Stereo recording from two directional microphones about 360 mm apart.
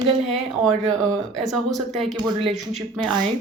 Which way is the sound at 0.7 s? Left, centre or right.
Centre.